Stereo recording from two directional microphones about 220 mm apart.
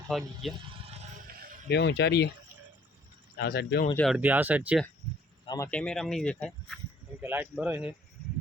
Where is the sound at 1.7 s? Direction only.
50° left (ahead or behind).